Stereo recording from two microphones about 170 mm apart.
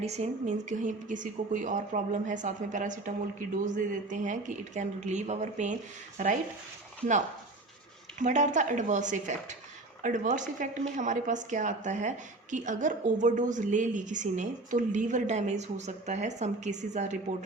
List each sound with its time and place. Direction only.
0.0 s a woman's voice: 40° right (ahead or behind)
8.2 s a woman's voice: 45° right (ahead or behind)